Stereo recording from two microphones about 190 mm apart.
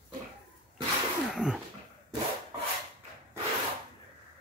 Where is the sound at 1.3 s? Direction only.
5° right (ahead or behind).